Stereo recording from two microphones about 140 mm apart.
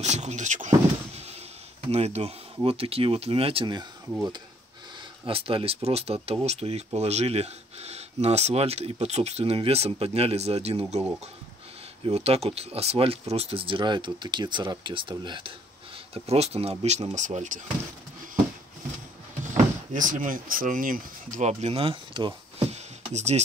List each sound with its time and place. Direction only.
0.0 s a sound: 55° right (ahead or behind)
1.9 s speech: 50° right (ahead or behind)
5.2 s speech: 40° right (ahead or behind)
12.0 s speech: 45° right (ahead or behind)
16.1 s speech: 45° right (ahead or behind)
19.5 s speech: 65° right (ahead or behind)
21.5 s speech: 50° right (ahead or behind)
23.1 s speech: 55° right (ahead or behind)